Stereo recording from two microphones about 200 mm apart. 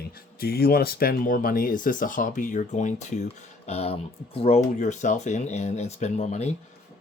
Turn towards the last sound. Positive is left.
turn(degrees=35)  # may be behind; listen again after turning